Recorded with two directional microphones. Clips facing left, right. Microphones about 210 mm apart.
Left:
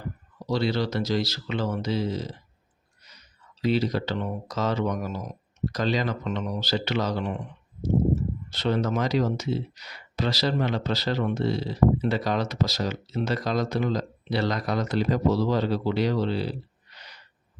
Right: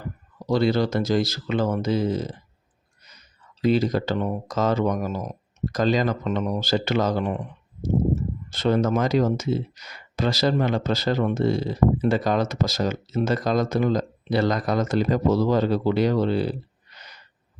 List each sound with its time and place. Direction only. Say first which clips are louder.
0.5 s speech: right 5 dB; 50° right (ahead or behind)
3.6 s speech: right 4 dB; 45° right (ahead or behind)